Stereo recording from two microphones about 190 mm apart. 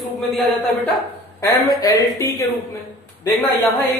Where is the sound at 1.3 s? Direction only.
20° left (ahead or behind).